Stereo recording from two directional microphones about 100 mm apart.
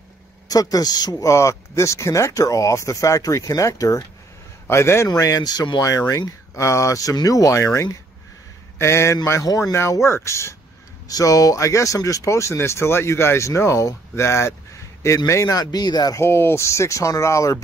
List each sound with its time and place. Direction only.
0.5 s speech: 40° left (ahead or behind)
1.3 s speech: 30° left (ahead or behind)
16.2 s speech: 25° left (ahead or behind)